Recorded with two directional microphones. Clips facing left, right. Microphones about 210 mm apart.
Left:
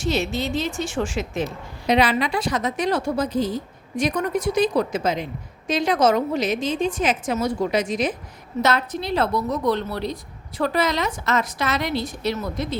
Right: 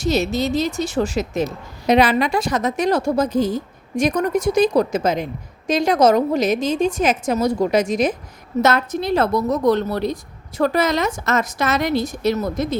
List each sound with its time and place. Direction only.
0.0 s a woman's voice: 40° right (ahead or behind)